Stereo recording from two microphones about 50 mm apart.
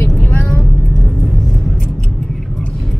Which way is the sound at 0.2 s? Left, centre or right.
Left.